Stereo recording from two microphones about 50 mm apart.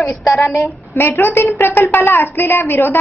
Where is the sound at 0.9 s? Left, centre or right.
Left.